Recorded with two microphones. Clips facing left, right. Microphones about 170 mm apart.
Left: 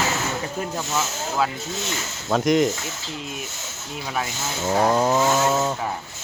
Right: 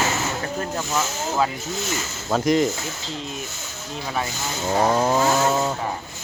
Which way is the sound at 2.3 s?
Centre (ahead or behind).